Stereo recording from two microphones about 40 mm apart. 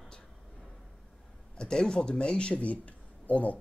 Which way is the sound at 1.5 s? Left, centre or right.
Centre.